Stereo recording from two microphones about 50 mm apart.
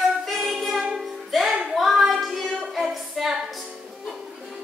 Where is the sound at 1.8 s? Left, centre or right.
Centre.